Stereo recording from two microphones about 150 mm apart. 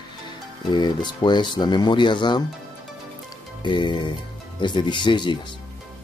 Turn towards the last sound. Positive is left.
turn(degrees=30)  # may be behind; listen again after turning